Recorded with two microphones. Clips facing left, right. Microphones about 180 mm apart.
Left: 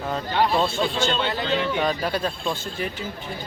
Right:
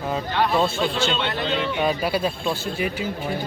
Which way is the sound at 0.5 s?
5° right (ahead or behind).